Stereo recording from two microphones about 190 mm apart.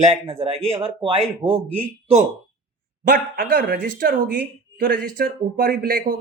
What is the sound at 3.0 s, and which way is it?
Speech, 55° right (ahead or behind).